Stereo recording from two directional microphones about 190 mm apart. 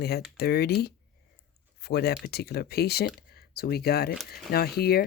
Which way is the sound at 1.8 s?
55° left (ahead or behind).